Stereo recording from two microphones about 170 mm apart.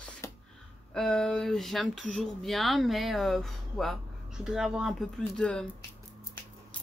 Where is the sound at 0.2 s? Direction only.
15° left (ahead or behind).